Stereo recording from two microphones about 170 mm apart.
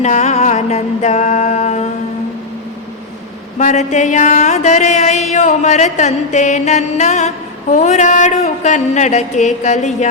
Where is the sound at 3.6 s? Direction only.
45° left (ahead or behind).